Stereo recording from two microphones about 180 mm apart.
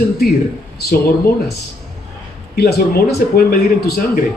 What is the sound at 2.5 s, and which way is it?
A man's voice, 60° left (ahead or behind).